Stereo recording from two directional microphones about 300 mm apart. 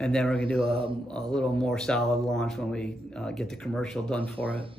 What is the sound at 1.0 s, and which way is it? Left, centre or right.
Speech, centre.